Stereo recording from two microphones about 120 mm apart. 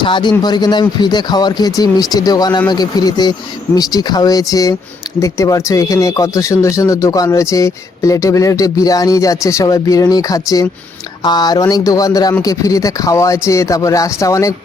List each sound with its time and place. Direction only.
0.0 s speech: 40° left (ahead or behind)